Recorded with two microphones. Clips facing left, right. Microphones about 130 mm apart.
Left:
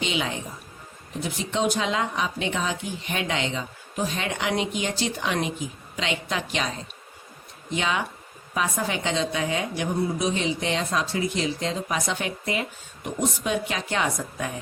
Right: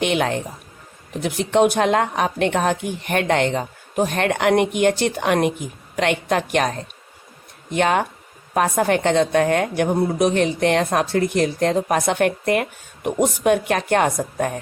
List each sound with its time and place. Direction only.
0.0 s speech: 60° right (ahead or behind)